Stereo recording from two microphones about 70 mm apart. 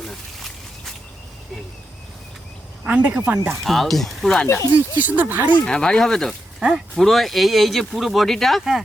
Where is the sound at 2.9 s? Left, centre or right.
Right.